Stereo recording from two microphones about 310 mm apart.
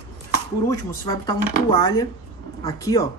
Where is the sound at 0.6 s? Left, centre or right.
Centre.